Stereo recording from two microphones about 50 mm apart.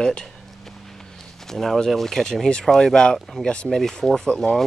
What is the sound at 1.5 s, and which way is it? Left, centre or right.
Speech, centre.